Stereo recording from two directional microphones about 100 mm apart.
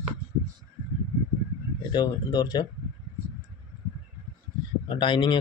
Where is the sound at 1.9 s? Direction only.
45° left (ahead or behind).